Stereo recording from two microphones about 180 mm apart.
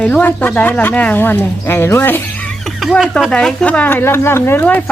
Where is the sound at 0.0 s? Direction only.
10° left (ahead or behind).